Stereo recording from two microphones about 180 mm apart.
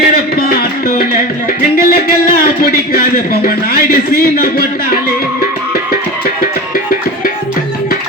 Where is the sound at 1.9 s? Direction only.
55° left (ahead or behind).